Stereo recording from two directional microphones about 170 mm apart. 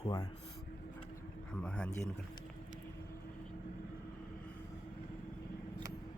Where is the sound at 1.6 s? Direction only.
5° left (ahead or behind).